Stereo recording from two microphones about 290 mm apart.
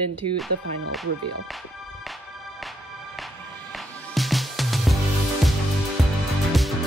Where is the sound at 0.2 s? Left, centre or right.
Right.